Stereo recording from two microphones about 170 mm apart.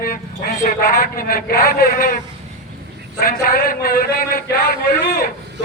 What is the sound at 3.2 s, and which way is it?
A man's voice, 60° left (ahead or behind).